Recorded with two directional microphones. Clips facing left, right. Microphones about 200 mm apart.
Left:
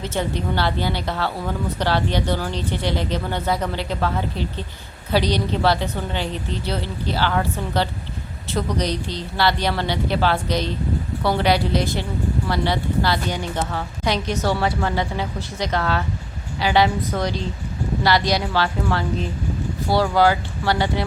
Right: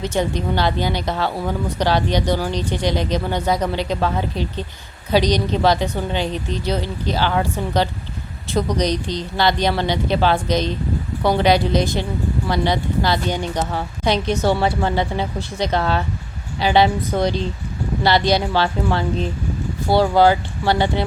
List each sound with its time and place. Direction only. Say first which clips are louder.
0.0 s a woman's voice: right 3 dB; 15° right (ahead or behind)